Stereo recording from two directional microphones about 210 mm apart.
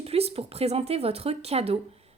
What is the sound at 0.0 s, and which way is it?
Speech, 30° right (ahead or behind).